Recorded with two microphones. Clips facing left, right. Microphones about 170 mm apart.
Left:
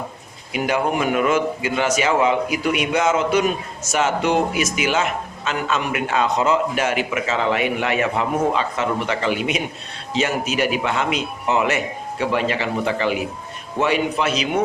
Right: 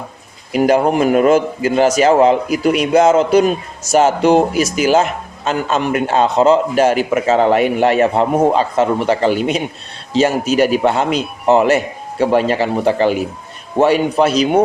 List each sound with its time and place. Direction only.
0.5 s a man's voice: 40° right (ahead or behind)